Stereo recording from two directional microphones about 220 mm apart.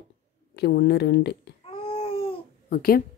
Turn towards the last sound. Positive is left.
turn(degrees=45)  # may be behind; listen again after turning